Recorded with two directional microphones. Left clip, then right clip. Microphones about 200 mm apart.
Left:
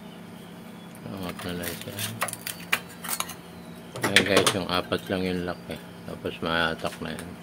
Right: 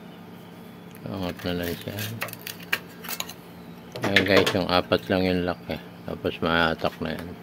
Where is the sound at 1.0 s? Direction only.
45° right (ahead or behind).